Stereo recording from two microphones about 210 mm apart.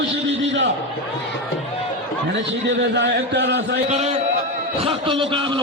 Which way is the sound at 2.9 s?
55° right (ahead or behind).